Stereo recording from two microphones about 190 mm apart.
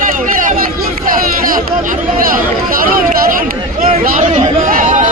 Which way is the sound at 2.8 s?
50° right (ahead or behind).